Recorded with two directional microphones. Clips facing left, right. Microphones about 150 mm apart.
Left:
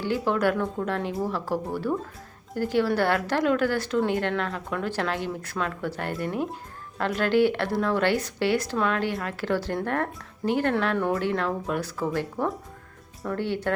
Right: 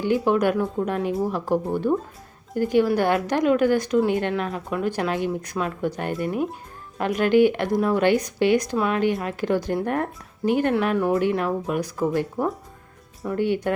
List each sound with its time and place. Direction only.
0.3 s a woman's voice: 15° right (ahead or behind)